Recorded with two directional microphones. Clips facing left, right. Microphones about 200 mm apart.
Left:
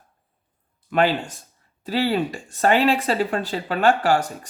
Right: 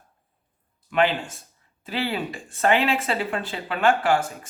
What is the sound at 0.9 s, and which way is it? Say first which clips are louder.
Speech: left 2 dB; 40° left (ahead or behind).